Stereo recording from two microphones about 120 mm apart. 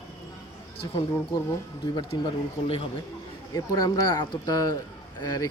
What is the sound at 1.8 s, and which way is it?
Speech, 35° left (ahead or behind).